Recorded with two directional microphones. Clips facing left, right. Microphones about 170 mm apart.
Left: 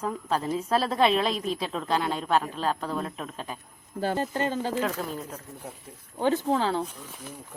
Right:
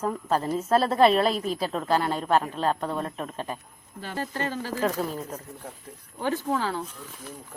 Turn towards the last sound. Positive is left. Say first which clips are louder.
# left 2 dB
turn(degrees=30)  # may be behind; listen again after turning